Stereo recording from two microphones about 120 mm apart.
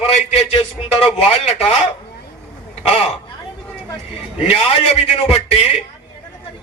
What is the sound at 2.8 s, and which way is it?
Speech, 60° left (ahead or behind).